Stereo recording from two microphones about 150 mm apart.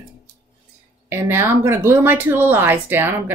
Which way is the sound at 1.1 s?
15° right (ahead or behind).